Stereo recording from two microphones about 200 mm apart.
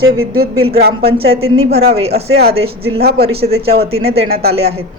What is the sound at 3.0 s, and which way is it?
Speech, 50° right (ahead or behind).